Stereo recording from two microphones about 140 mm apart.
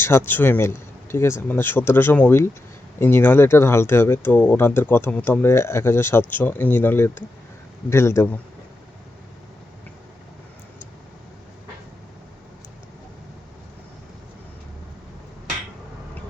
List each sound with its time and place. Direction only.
0.0 s speech: 15° left (ahead or behind)